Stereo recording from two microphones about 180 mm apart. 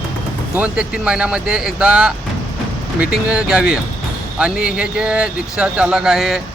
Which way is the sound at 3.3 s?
5° right (ahead or behind).